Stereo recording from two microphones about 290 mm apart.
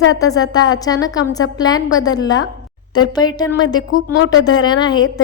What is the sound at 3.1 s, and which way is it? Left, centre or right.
Speech, centre.